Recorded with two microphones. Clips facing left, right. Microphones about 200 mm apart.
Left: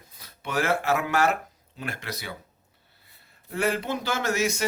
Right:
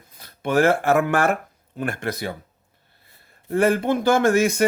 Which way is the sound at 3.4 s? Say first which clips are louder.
Right 8 dB; 50° right (ahead or behind).